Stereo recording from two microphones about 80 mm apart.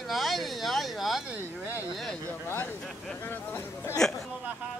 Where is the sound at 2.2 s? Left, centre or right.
Left.